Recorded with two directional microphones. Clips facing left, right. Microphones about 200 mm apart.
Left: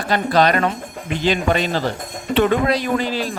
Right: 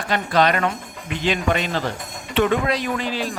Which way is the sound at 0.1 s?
35° left (ahead or behind).